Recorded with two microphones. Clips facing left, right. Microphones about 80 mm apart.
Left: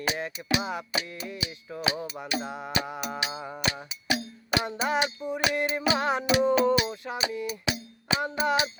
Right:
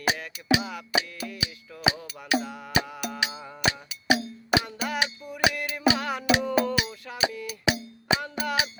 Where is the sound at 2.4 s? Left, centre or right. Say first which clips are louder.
Left 1 dB; left.